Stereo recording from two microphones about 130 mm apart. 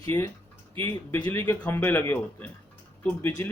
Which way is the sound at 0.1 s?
20° left (ahead or behind).